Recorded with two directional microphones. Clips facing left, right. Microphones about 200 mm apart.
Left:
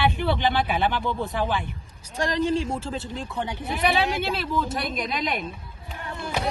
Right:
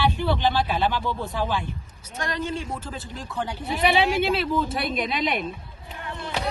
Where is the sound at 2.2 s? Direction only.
35° left (ahead or behind).